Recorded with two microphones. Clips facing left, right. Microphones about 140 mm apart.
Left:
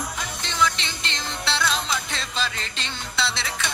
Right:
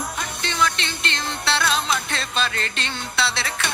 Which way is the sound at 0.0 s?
60° right (ahead or behind).